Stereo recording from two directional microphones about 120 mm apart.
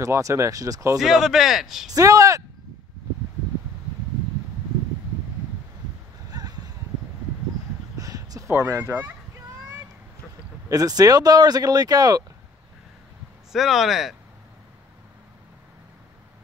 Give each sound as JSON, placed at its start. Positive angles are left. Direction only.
{"t": 0.0, "sound": "speech", "side_deg": -25}
{"t": 0.9, "sound": "speech", "side_deg": -5}
{"t": 1.9, "sound": "speech", "side_deg": -30}
{"t": 6.3, "sound": "a sound", "side_deg": -30}
{"t": 8.0, "sound": "a sound", "side_deg": -30}
{"t": 10.7, "sound": "speech", "side_deg": -30}
{"t": 13.5, "sound": "speech", "side_deg": 0}